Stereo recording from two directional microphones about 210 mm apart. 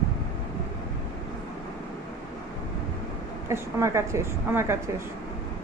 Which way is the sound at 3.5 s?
15° right (ahead or behind).